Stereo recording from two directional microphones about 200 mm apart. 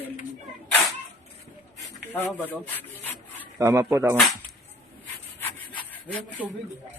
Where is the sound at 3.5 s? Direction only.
15° right (ahead or behind).